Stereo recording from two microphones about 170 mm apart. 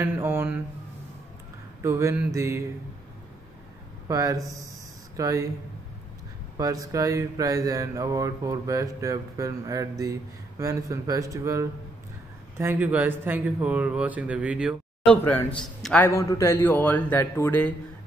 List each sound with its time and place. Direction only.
0.0 s speech: 15° right (ahead or behind)
1.8 s speech: 15° right (ahead or behind)
4.1 s mantra: 20° right (ahead or behind)
5.1 s speech: 20° right (ahead or behind)
6.5 s mantra: 20° right (ahead or behind)
12.5 s speech: 10° right (ahead or behind)
15.0 s speech: 10° left (ahead or behind)
16.1 s speech: 20° left (ahead or behind)